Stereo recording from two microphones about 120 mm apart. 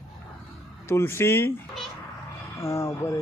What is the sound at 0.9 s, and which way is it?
Speech, 20° left (ahead or behind).